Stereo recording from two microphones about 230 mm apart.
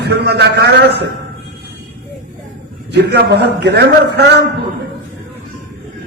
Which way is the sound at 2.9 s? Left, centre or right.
Right.